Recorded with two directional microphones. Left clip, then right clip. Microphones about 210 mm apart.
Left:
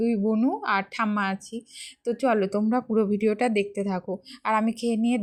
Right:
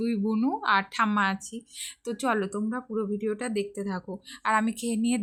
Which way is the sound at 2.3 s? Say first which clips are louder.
Left 6 dB; 15° left (ahead or behind).